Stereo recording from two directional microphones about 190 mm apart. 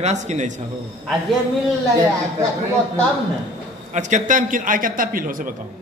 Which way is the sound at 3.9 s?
40° right (ahead or behind).